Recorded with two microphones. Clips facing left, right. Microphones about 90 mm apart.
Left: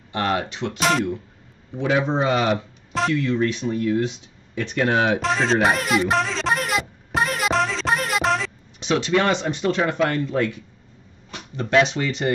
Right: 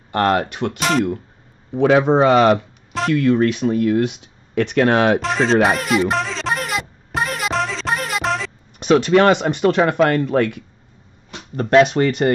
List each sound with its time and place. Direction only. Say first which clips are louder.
0.1 s speech: right 6 dB; 55° right (ahead or behind)
0.7 s speech: right 1 dB; centre (ahead or behind)
1.8 s speech: right 8 dB; 60° right (ahead or behind)
5.2 s a sound: right 3 dB; centre (ahead or behind)
8.7 s speech: right 7 dB; 50° right (ahead or behind)